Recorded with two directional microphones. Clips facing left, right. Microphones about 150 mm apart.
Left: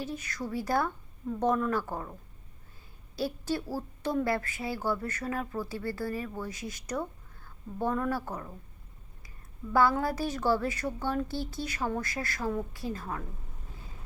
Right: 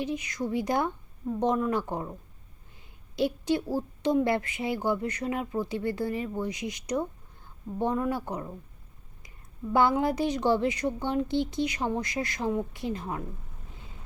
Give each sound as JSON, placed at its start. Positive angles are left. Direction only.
{"t": 0.0, "sound": "speech", "side_deg": -15}
{"t": 3.2, "sound": "a woman's voice", "side_deg": -20}
{"t": 9.7, "sound": "a woman's voice", "side_deg": -20}